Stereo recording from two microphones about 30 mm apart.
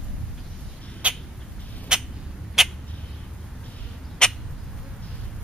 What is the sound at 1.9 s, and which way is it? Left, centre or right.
Rodents, right.